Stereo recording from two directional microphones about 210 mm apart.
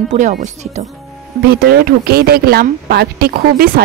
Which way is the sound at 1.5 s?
45° right (ahead or behind).